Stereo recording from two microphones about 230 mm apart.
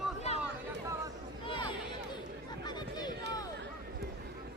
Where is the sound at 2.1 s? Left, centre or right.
Centre.